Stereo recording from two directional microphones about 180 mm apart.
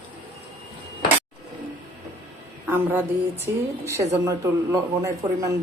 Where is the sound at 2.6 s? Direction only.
10° right (ahead or behind).